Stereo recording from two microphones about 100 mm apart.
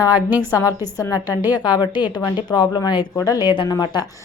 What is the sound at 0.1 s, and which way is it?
Speech, 15° right (ahead or behind).